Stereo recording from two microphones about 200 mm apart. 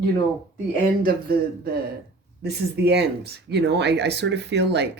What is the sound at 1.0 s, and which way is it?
Speech, 50° right (ahead or behind).